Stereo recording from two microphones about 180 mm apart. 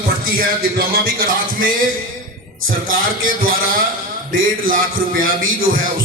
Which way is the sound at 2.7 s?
50° right (ahead or behind).